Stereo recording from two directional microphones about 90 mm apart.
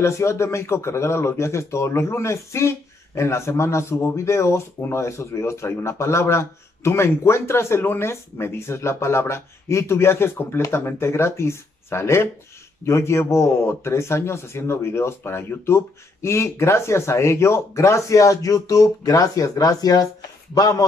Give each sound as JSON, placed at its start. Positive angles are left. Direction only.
{"t": 0.0, "sound": "speech", "side_deg": 30}